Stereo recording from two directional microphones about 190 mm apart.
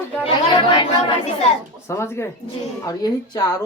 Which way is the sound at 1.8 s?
15° left (ahead or behind).